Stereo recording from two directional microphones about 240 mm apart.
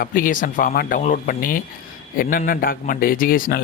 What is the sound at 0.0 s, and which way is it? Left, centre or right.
Speech, left.